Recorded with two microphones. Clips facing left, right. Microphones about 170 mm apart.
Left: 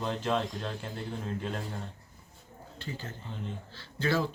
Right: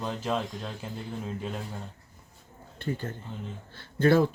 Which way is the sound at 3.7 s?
55° right (ahead or behind).